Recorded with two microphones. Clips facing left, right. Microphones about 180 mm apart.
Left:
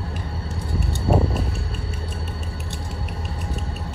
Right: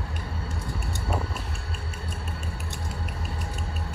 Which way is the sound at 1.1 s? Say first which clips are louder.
Left 10 dB; 35° left (ahead or behind).